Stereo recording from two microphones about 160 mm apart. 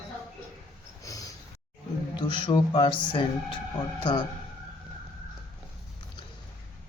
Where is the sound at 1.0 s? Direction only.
20° left (ahead or behind).